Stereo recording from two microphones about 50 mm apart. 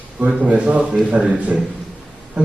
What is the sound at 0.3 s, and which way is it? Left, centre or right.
A man's voice, right.